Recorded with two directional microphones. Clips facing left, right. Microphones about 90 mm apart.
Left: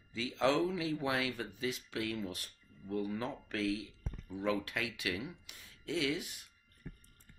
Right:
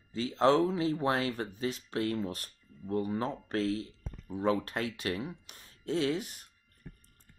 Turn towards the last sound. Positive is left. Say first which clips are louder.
# right 5 dB
turn(degrees=-40)  # may be behind; listen again after turning